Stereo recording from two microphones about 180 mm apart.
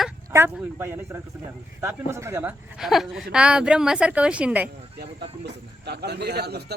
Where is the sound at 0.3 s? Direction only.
10° right (ahead or behind).